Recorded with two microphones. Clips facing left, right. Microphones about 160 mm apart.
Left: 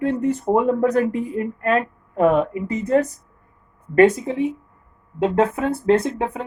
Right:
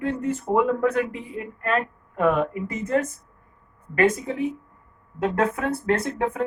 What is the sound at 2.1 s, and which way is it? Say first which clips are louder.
Speech: left 4 dB; 30° left (ahead or behind).